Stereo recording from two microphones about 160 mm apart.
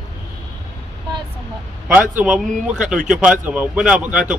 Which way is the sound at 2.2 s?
5° right (ahead or behind).